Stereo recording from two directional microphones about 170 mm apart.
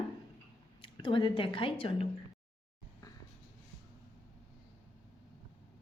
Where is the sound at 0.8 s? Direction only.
30° left (ahead or behind).